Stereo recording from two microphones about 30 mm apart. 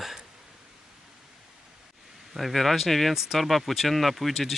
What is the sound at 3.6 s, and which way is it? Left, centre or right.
Speech, centre.